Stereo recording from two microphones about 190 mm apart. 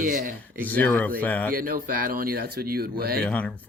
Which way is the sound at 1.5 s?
50° right (ahead or behind).